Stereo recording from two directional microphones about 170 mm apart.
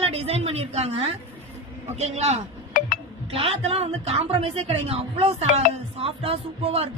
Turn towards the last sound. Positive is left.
turn(degrees=-35)  # may be behind; listen again after turning